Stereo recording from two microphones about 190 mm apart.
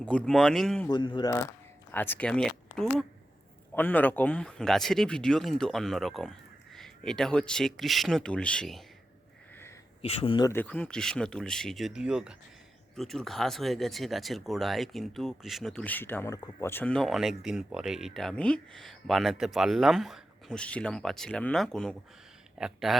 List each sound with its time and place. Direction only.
0.0 s speech: 5° left (ahead or behind)
0.9 s speech: 25° left (ahead or behind)
1.9 s speech: 10° left (ahead or behind)
10.0 s speech: 30° left (ahead or behind)
10.5 s speech: 10° left (ahead or behind)